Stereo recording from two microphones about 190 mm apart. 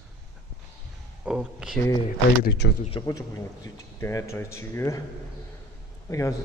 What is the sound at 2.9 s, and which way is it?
Speech, 20° left (ahead or behind).